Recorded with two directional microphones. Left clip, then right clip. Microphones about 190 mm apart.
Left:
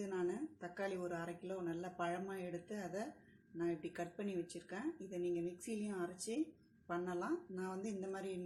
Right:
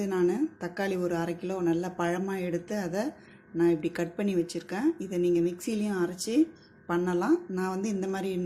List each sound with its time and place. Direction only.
0.0 s speech: 35° right (ahead or behind)